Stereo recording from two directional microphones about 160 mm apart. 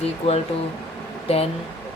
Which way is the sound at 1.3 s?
40° left (ahead or behind).